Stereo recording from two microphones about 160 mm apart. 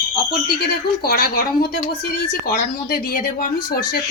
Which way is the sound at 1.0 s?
70° left (ahead or behind).